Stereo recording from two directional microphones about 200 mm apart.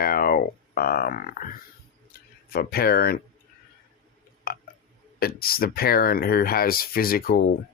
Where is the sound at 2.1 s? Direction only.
50° left (ahead or behind).